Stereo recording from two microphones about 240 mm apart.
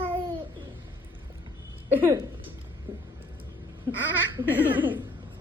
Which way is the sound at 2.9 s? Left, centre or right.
Centre.